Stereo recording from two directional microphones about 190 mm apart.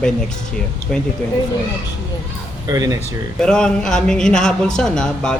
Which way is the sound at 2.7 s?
20° right (ahead or behind).